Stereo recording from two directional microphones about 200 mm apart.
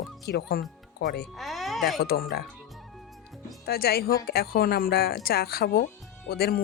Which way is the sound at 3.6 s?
50° left (ahead or behind).